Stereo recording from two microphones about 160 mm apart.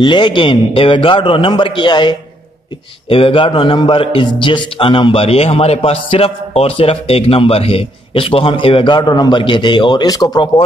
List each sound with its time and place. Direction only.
0.0 s a man's voice: 30° left (ahead or behind)